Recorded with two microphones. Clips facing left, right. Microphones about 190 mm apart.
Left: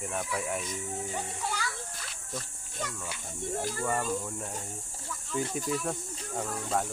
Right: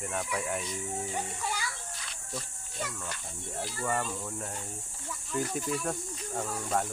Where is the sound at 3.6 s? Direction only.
45° left (ahead or behind).